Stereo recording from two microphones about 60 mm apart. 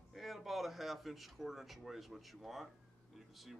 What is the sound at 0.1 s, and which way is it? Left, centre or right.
Speech, centre.